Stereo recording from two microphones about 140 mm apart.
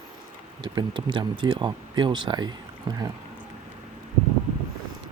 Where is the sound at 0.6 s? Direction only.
35° right (ahead or behind).